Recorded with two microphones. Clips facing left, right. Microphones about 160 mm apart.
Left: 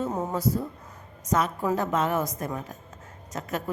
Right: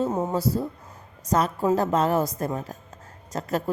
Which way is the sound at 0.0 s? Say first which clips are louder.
Right 3 dB; 20° right (ahead or behind).